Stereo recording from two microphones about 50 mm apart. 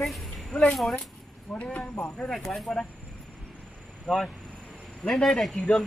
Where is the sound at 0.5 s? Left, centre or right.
Left.